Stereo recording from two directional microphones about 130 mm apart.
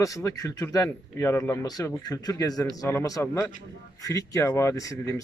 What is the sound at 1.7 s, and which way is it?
Speech, 30° left (ahead or behind).